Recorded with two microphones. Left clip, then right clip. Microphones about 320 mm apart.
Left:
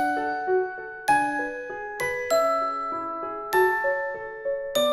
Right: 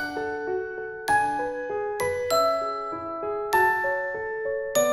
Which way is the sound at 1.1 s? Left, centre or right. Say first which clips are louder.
Left 1 dB; centre.